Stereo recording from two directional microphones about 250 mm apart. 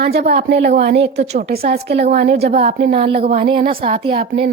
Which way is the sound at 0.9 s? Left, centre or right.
Right.